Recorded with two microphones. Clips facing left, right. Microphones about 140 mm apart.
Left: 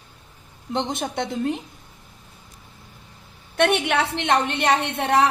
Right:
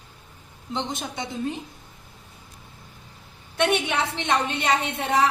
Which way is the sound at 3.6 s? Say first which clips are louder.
Left 3 dB; 65° left (ahead or behind).